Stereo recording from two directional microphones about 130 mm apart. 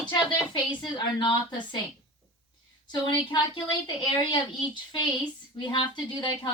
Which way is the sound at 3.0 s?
35° left (ahead or behind).